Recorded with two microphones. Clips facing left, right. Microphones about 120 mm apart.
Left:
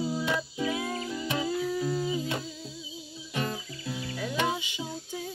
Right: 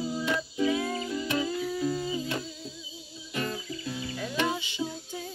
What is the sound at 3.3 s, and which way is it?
Music, 15° left (ahead or behind).